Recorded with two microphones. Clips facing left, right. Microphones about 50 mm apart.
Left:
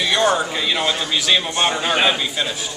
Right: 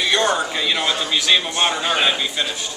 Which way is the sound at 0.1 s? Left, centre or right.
Centre.